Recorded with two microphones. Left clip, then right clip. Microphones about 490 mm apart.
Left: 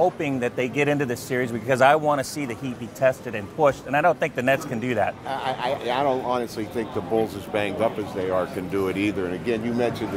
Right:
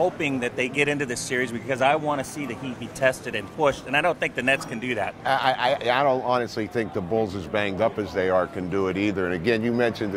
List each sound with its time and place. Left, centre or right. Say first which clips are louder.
0.0 s speech: left 2 dB; left
3.0 s speech: left 1 dB; left
5.2 s speech: right 5 dB; right